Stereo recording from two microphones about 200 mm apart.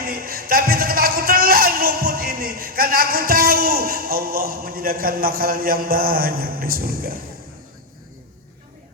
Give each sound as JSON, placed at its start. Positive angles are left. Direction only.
{"t": 0.0, "sound": "a man's voice", "side_deg": -45}